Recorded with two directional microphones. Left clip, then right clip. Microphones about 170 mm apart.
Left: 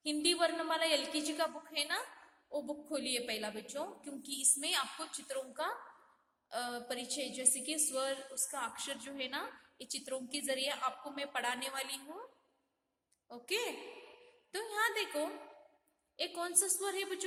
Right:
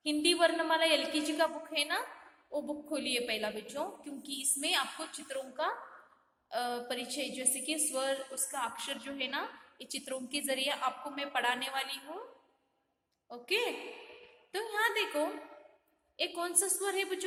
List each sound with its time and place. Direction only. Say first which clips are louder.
0.0 s a woman's voice: right 4 dB; 15° left (ahead or behind)
13.2 s a woman's voice: right 5 dB; 20° left (ahead or behind)